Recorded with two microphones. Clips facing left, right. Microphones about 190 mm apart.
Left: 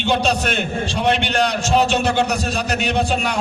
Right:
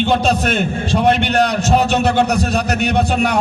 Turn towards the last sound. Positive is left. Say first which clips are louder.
# right 4 dB
turn(degrees=-60)  # may be behind; listen again after turning